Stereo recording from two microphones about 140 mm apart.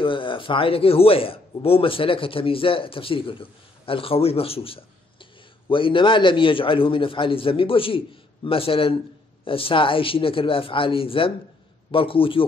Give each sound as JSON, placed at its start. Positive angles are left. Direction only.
{"t": 0.0, "sound": "speech", "side_deg": 40}